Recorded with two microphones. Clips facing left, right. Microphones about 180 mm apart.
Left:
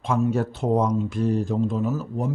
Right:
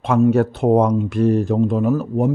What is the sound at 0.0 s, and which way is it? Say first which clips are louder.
Speech: right 8 dB; 65° right (ahead or behind).